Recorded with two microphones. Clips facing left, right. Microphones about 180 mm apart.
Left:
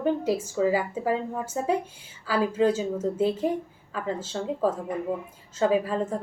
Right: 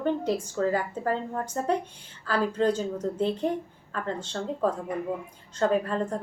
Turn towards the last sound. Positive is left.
turn(degrees=5)  # may be behind; listen again after turning